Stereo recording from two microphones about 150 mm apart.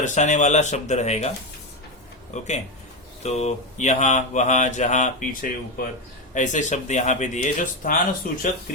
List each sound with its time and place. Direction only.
0.0 s speech: 50° left (ahead or behind)
2.3 s speech: 50° left (ahead or behind); by 8.4 s 65° left (ahead or behind)